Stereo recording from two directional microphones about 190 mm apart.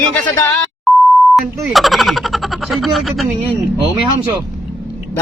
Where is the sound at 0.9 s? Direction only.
Centre (ahead or behind).